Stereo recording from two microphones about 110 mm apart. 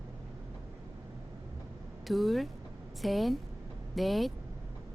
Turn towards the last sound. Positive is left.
turn(degrees=0)  # may be behind; listen again after turning